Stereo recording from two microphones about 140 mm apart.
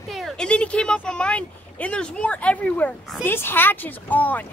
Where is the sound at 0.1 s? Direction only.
Centre (ahead or behind).